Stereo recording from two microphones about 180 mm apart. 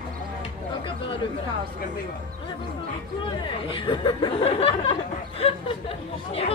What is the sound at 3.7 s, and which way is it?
Speech, 25° left (ahead or behind).